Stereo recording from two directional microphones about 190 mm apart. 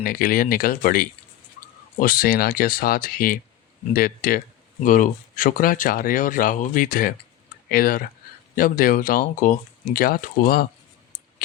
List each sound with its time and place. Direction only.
0.0 s speech: 50° left (ahead or behind)